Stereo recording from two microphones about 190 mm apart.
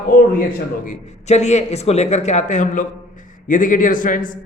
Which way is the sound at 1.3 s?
35° left (ahead or behind).